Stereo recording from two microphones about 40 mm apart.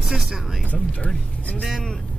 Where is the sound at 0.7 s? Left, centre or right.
Left.